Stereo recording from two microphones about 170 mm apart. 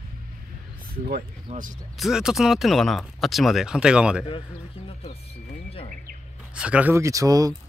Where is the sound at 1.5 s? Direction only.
50° right (ahead or behind).